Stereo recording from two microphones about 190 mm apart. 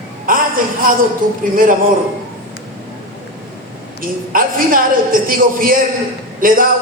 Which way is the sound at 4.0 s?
45° right (ahead or behind).